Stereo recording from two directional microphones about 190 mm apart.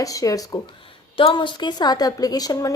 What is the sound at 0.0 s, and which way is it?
A woman's voice, 20° left (ahead or behind).